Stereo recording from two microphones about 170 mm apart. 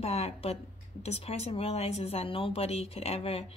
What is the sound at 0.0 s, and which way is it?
Speech, 40° left (ahead or behind).